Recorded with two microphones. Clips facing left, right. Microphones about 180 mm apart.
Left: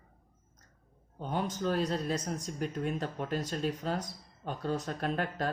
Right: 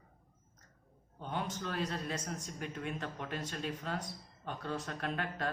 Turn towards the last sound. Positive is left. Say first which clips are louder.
# left 5 dB
turn(degrees=40)  # may be behind; listen again after turning